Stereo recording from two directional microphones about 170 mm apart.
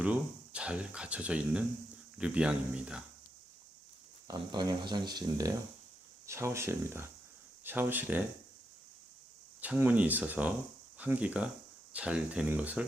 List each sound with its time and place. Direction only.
0.0 s speech: 5° right (ahead or behind)
4.3 s speech: 25° right (ahead or behind); by 8.2 s 10° right (ahead or behind)
9.6 s speech: 10° right (ahead or behind)